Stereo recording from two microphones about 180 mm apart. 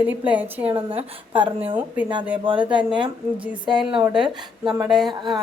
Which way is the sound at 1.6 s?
10° right (ahead or behind).